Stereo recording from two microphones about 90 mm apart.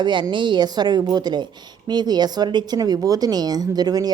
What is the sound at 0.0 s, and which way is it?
A woman's voice, 60° right (ahead or behind).